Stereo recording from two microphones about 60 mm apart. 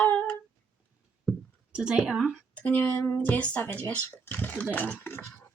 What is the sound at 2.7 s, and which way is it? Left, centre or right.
Speech, left.